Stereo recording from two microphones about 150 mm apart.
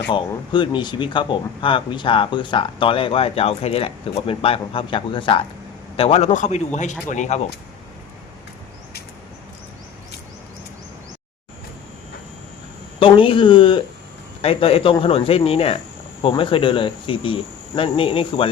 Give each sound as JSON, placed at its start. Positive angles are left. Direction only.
{"t": 0.1, "sound": "a man's voice", "side_deg": 35}
{"t": 13.0, "sound": "speech", "side_deg": 35}